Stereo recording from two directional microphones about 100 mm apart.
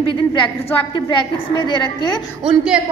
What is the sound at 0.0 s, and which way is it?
A woman's voice, 50° left (ahead or behind).